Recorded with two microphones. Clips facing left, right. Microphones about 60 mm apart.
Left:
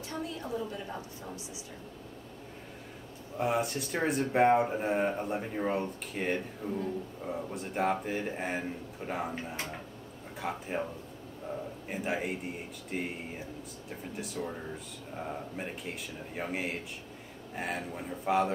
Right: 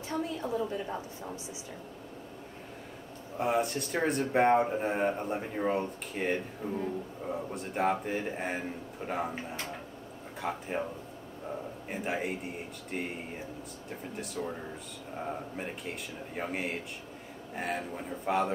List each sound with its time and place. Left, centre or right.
0.1 s a sound: right
3.3 s speech: centre
10.4 s speech: centre
11.9 s speech: centre